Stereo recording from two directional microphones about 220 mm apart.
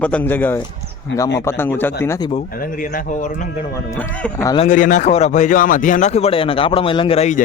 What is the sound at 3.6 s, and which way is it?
Speech, 10° left (ahead or behind).